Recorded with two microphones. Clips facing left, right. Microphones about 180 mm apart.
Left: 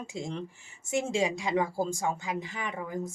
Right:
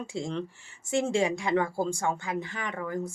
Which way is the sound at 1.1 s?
20° left (ahead or behind).